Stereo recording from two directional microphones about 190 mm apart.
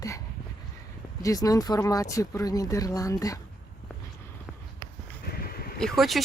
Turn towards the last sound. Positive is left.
turn(degrees=0)  # may be behind; listen again after turning